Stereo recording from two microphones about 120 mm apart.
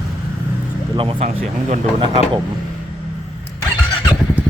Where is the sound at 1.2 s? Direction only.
65° right (ahead or behind).